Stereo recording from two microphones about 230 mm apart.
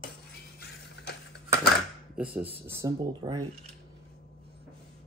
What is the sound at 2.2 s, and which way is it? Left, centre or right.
Speech, centre.